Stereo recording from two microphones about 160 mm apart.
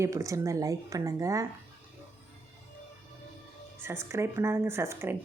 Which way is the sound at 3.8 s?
15° right (ahead or behind).